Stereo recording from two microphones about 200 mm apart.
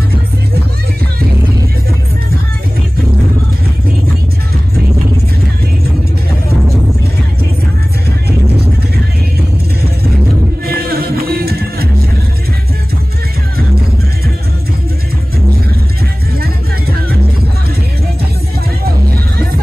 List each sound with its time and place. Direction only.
10.7 s music: 50° right (ahead or behind)